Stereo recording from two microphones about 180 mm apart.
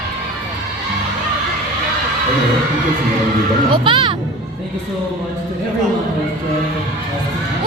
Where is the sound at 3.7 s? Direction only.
30° right (ahead or behind).